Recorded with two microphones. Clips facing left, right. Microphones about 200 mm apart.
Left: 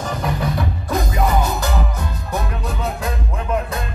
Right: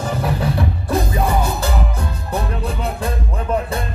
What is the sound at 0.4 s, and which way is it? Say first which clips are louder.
Music: right 2 dB; 30° right (ahead or behind).